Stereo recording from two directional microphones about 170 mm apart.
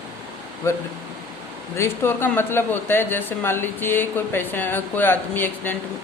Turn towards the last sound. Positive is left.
turn(degrees=10)  # may be behind; listen again after turning